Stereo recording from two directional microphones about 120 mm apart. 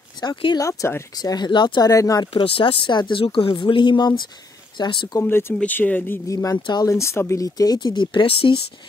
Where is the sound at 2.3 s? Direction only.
45° left (ahead or behind).